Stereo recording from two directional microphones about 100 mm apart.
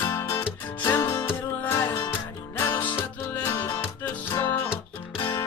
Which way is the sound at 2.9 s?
20° left (ahead or behind).